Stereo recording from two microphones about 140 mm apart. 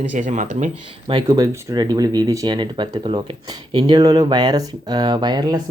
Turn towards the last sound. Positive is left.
turn(degrees=-30)  # may be behind; listen again after turning